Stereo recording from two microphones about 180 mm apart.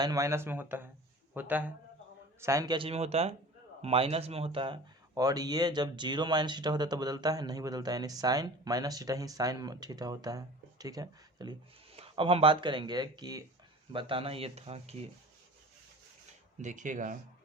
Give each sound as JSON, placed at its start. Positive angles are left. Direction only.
{"t": 0.0, "sound": "speech", "side_deg": -20}
{"t": 16.6, "sound": "speech", "side_deg": -45}